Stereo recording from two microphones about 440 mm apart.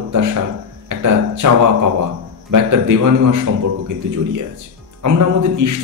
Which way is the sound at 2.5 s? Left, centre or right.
Right.